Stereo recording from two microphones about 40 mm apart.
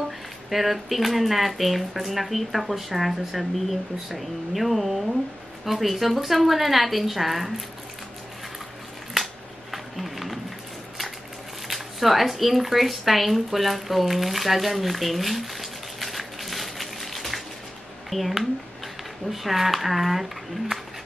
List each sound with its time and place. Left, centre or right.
0.5 s speech: centre
9.1 s a sound: centre
11.6 s speech: centre